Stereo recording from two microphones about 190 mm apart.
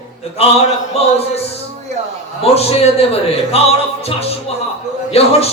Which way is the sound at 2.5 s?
30° left (ahead or behind).